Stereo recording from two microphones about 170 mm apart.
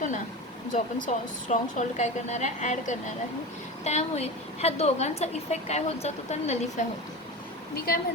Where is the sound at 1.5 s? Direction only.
40° left (ahead or behind).